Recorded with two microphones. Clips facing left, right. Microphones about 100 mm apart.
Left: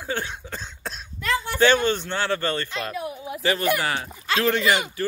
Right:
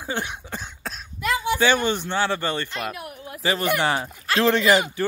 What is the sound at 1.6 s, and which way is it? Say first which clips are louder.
Speech: left 4 dB; 10° right (ahead or behind).